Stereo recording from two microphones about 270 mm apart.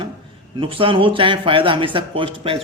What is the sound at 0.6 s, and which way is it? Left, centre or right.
A man's voice, centre.